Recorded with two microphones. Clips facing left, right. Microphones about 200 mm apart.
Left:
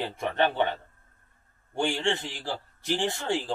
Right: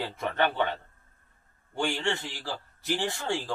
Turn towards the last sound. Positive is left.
turn(degrees=20)  # may be behind; listen again after turning